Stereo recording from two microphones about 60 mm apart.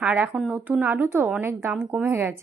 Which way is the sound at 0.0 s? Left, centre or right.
Right.